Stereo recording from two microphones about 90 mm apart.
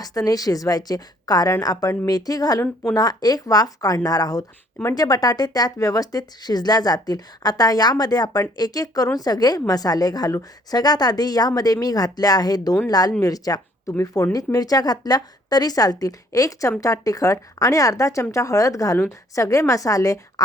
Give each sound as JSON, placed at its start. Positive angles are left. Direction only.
{"t": 0.0, "sound": "a woman's voice", "side_deg": 40}